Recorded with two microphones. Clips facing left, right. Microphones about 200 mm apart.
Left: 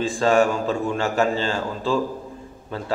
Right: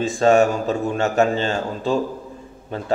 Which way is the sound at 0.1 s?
25° right (ahead or behind).